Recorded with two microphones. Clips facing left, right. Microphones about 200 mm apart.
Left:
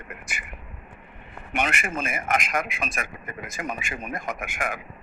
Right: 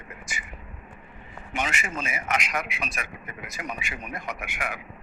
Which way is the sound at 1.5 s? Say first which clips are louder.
Left 3 dB; 60° left (ahead or behind).